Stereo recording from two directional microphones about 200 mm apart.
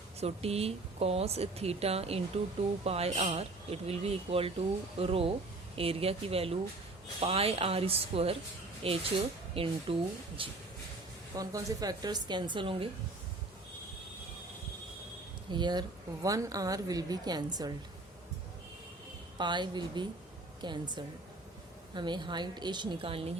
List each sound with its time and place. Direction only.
0.2 s speech: 30° right (ahead or behind)
15.5 s speech: 20° right (ahead or behind)
19.4 s speech: 20° right (ahead or behind)